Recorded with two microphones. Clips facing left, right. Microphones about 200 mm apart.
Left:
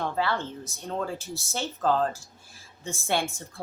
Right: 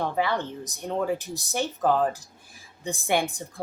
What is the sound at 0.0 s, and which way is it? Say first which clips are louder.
Speech: right 2 dB; 15° right (ahead or behind).